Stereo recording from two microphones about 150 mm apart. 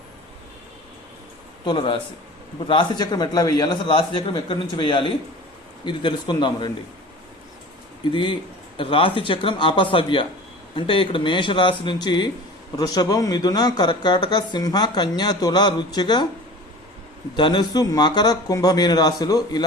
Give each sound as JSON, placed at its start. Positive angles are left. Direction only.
{"t": 1.6, "sound": "speech", "side_deg": 30}
{"t": 8.1, "sound": "speech", "side_deg": 35}
{"t": 17.3, "sound": "speech", "side_deg": 30}